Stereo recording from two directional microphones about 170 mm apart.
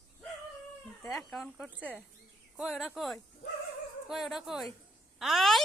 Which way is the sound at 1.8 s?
10° right (ahead or behind).